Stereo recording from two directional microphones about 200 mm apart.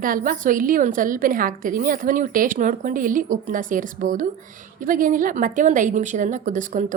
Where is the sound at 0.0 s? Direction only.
45° right (ahead or behind).